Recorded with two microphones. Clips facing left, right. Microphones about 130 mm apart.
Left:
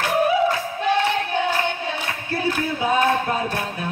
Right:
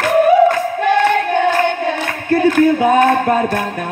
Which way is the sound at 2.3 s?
50° right (ahead or behind).